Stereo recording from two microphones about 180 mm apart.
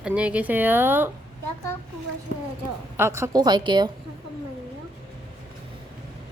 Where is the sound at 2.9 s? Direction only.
15° right (ahead or behind).